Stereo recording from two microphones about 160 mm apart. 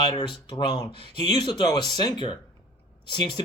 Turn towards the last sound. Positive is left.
turn(degrees=30)  # may be behind; listen again after turning